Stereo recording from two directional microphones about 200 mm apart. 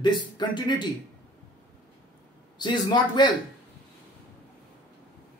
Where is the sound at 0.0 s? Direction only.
20° left (ahead or behind).